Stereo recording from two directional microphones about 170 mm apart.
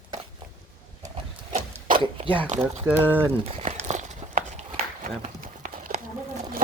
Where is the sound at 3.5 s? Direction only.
40° right (ahead or behind).